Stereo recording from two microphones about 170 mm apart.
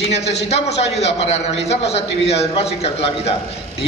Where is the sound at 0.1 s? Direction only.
40° left (ahead or behind).